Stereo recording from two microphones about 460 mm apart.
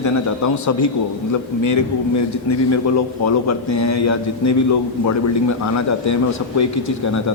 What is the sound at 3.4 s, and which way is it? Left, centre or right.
A man's voice, left.